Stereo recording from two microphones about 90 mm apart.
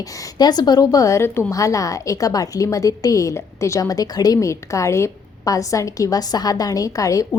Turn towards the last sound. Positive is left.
turn(degrees=40)  # may be behind; listen again after turning